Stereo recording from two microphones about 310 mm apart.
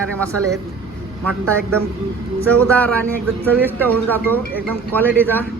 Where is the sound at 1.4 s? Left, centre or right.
Right.